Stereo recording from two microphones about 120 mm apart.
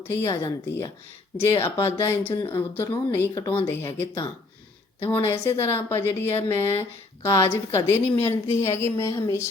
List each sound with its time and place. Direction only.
0.1 s a woman's voice: 25° left (ahead or behind)